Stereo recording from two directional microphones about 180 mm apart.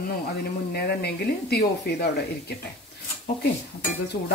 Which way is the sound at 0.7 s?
65° left (ahead or behind).